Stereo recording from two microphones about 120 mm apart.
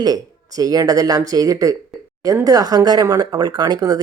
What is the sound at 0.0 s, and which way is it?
Speech, 30° right (ahead or behind).